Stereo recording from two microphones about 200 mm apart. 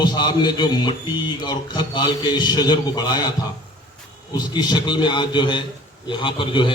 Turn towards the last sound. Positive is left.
turn(degrees=25)  # may be behind; listen again after turning